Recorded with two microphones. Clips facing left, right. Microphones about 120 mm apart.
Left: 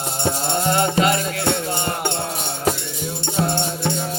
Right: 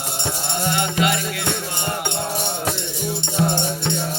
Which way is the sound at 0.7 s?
40° left (ahead or behind).